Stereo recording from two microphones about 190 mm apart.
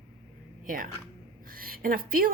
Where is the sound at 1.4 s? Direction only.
50° right (ahead or behind).